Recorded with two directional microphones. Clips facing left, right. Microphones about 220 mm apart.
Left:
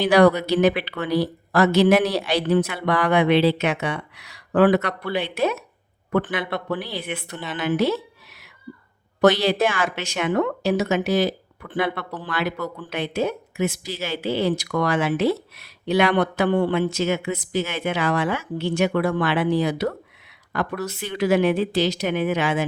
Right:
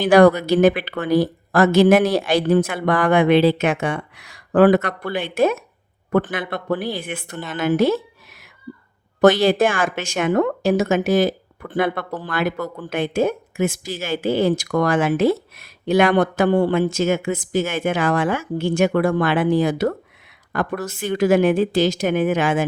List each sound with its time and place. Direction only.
0.0 s a woman's voice: 50° right (ahead or behind)